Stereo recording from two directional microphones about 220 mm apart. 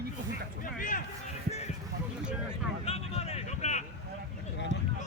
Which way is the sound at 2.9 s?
30° left (ahead or behind).